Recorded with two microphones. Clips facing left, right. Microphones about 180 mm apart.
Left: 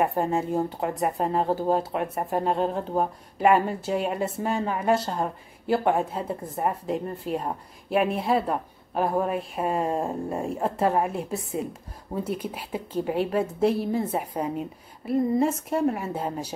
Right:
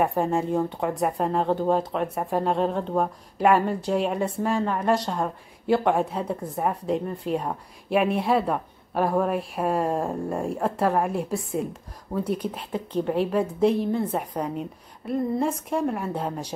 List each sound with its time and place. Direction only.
0.0 s a woman's voice: centre (ahead or behind)